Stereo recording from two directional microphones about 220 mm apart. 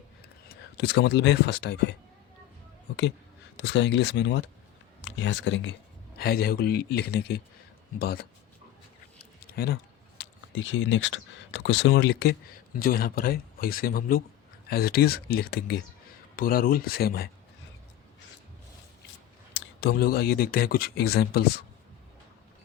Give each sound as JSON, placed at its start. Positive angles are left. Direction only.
{"t": 0.4, "sound": "speech", "side_deg": 50}
{"t": 3.6, "sound": "speech", "side_deg": 55}
{"t": 6.1, "sound": "speech", "side_deg": 45}
{"t": 9.4, "sound": "a sound", "side_deg": 45}
{"t": 10.2, "sound": "speech", "side_deg": 60}
{"t": 19.5, "sound": "speech", "side_deg": 50}